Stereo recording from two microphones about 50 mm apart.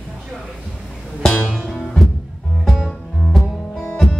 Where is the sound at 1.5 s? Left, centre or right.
Centre.